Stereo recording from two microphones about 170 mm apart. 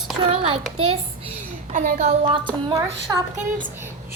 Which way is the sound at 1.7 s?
50° right (ahead or behind).